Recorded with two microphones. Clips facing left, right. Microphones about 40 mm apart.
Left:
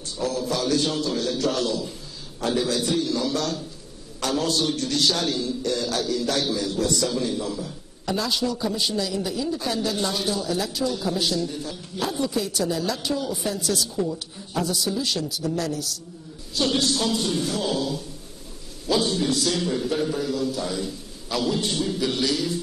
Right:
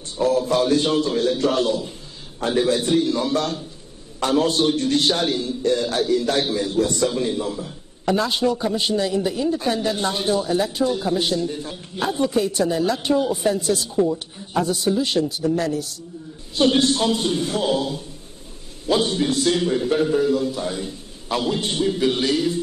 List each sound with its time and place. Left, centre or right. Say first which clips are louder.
0.2 s a man's voice: right 7 dB; right